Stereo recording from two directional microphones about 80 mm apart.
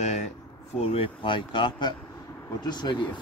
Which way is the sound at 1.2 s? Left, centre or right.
Left.